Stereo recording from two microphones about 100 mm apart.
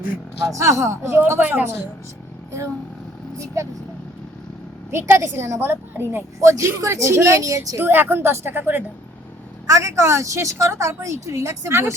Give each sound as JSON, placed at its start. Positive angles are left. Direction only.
{"t": 0.4, "sound": "a woman's voice", "side_deg": -30}
{"t": 3.3, "sound": "a woman's voice", "side_deg": -30}
{"t": 4.9, "sound": "a woman's voice", "side_deg": -25}
{"t": 7.8, "sound": "a woman's voice", "side_deg": -20}
{"t": 9.6, "sound": "a woman's voice", "side_deg": -35}